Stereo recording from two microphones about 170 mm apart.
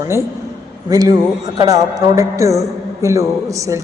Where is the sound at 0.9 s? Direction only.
20° right (ahead or behind).